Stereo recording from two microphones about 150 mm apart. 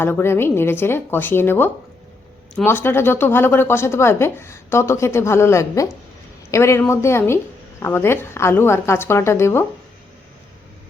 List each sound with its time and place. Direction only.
0.0 s speech: 15° left (ahead or behind)